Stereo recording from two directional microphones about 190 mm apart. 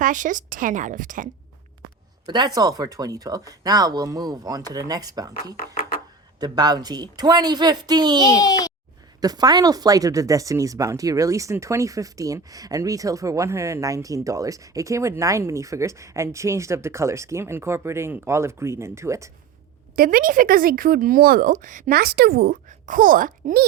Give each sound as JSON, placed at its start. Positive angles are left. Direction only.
{"t": 0.0, "sound": "a woman's voice", "side_deg": -40}
{"t": 2.2, "sound": "speech", "side_deg": -20}
{"t": 6.4, "sound": "speech", "side_deg": -20}
{"t": 8.4, "sound": "a child's voice", "side_deg": 20}
{"t": 9.2, "sound": "speech", "side_deg": -20}
{"t": 20.0, "sound": "a woman's voice", "side_deg": -45}